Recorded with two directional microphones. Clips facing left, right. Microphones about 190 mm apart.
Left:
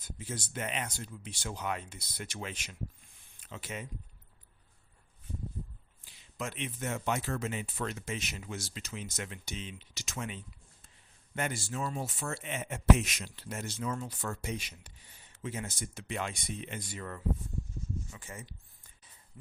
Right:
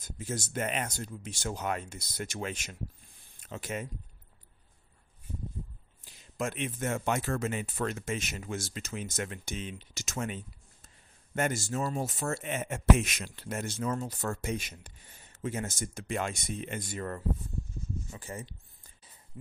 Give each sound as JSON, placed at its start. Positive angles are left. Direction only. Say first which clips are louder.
{"t": 0.0, "sound": "speech", "louder": "right 4 dB", "side_deg": -45}
{"t": 6.1, "sound": "speech", "louder": "right 5 dB", "side_deg": -45}
{"t": 18.1, "sound": "a sound", "louder": "right 5 dB", "side_deg": -35}